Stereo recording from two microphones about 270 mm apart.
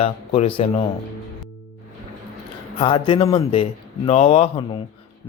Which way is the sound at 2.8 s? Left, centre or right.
Centre.